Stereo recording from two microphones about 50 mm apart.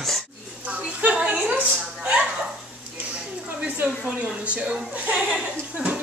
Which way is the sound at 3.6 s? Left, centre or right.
Right.